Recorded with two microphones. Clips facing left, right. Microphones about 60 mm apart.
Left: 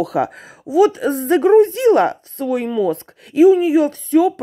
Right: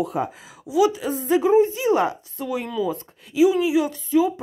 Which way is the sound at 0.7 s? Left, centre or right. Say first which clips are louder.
Left 6 dB; left.